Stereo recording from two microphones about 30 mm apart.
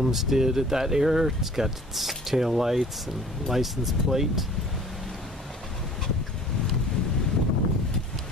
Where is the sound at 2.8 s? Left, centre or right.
Centre.